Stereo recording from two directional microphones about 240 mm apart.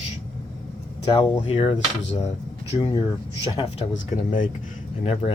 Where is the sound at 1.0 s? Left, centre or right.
Left.